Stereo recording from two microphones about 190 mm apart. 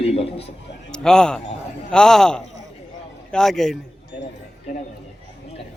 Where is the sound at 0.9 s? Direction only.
5° left (ahead or behind).